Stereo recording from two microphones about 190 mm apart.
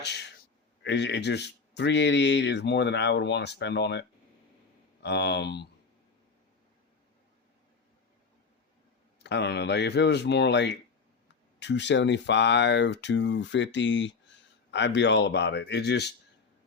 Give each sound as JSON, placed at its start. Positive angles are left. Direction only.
{"t": 0.0, "sound": "speech", "side_deg": 60}
{"t": 5.0, "sound": "speech", "side_deg": 65}
{"t": 9.2, "sound": "speech", "side_deg": 65}